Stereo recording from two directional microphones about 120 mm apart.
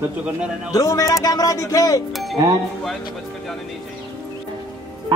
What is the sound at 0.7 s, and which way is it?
Speech, 25° left (ahead or behind).